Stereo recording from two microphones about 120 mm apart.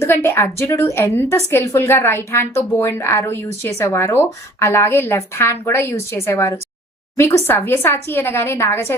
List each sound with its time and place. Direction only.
0.0 s a woman's voice: 20° left (ahead or behind)